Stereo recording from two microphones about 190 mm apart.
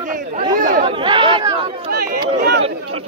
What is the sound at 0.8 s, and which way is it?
Speech, 25° right (ahead or behind).